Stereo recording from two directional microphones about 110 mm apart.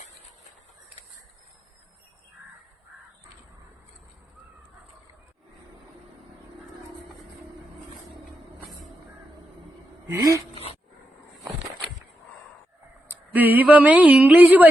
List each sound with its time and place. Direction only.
10.2 s speech: 30° right (ahead or behind)
13.3 s mantra: 15° right (ahead or behind)